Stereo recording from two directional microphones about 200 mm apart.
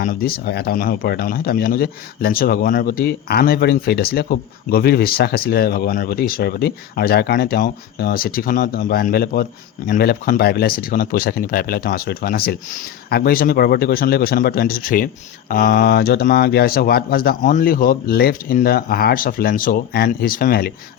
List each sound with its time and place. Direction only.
0.0 s speech: 45° left (ahead or behind)